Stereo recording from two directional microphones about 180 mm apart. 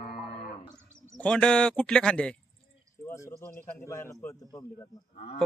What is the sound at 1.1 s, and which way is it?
A man's voice, 5° left (ahead or behind).